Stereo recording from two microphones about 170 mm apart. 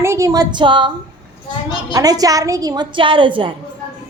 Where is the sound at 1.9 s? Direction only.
20° right (ahead or behind).